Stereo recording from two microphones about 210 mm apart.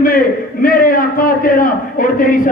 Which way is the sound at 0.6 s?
45° left (ahead or behind).